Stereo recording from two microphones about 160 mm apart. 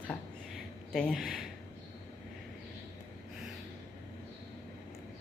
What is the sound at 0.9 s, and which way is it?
Speech, centre (ahead or behind).